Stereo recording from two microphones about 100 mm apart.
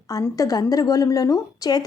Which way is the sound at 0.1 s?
35° left (ahead or behind).